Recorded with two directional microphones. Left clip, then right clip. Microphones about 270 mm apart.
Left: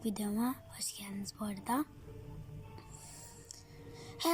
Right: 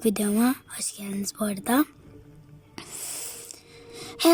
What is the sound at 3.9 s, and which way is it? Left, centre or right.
Gasp, right.